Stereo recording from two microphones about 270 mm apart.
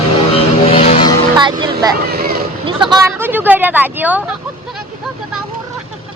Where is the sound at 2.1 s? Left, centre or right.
Right.